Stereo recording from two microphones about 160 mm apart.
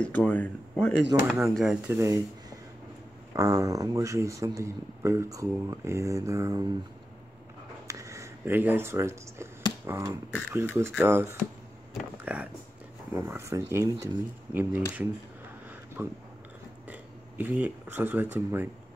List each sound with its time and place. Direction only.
0.0 s speech: 10° left (ahead or behind)
1.9 s speech: 20° right (ahead or behind)
3.3 s speech: 20° right (ahead or behind)
7.8 s a sound: 20° right (ahead or behind)
10.5 s speech: 15° right (ahead or behind)